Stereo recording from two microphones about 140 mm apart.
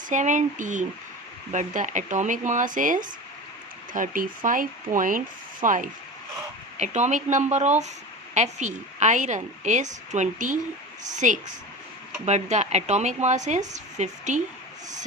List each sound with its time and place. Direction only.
0.1 s a woman's voice: 60° right (ahead or behind)
6.7 s a woman's voice: 55° right (ahead or behind)